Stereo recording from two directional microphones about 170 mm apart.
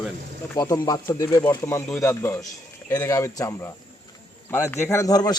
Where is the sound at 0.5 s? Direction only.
20° left (ahead or behind).